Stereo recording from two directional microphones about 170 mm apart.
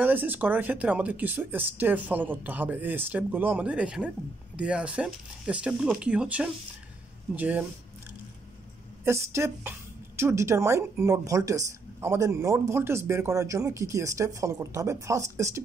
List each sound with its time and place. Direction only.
0.0 s a woman's voice: 10° right (ahead or behind)
9.0 s a woman's voice: 15° right (ahead or behind)